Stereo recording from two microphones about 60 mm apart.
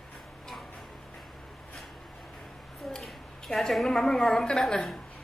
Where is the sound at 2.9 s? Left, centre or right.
Centre.